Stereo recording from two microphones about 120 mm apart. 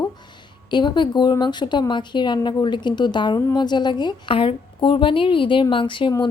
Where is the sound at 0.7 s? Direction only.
40° left (ahead or behind).